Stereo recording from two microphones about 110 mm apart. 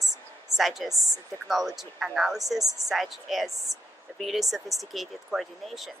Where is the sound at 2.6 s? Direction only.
30° right (ahead or behind).